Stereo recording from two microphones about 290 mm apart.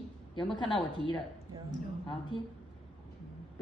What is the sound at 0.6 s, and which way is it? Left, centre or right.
Speech, centre.